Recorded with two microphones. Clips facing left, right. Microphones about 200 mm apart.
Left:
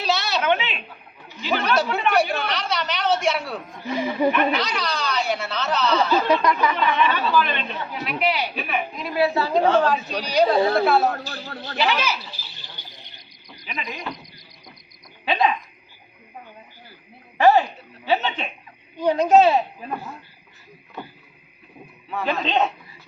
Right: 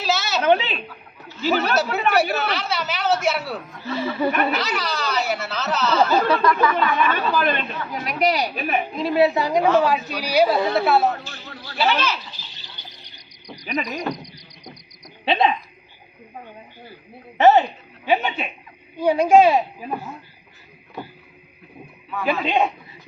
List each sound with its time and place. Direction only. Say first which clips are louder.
0.0 s a sound: even; centre (ahead or behind)
0.4 s a sound: right 6 dB; 35° right (ahead or behind)
1.5 s speech: left 1 dB; 5° right (ahead or behind)
3.8 s speech: left 1 dB; 15° left (ahead or behind)
4.5 s speech: even; 5° right (ahead or behind)
6.2 s speech: right 1 dB; 20° left (ahead or behind)
6.7 s speech: right 1 dB; 45° right (ahead or behind)
9.0 s a woman's voice: right 4 dB; 25° right (ahead or behind); by 11.1 s centre (ahead or behind)
11.2 s a man's voice: left 5 dB; 35° left (ahead or behind)
11.8 s speech: right 2 dB; 10° left (ahead or behind)
13.9 s speech: right 6 dB; 45° right (ahead or behind)
15.2 s speech: right 2 dB; 25° right (ahead or behind)
17.3 s a woman's voice: right 2 dB; 20° right (ahead or behind)
22.2 s a woman's voice: right 2 dB; 10° right (ahead or behind)